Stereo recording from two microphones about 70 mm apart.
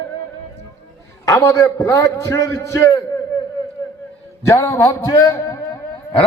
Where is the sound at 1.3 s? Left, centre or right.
Left.